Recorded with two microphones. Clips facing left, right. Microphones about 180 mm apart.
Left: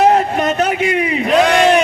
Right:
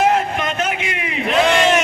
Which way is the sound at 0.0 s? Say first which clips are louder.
Left 5 dB; 40° left (ahead or behind).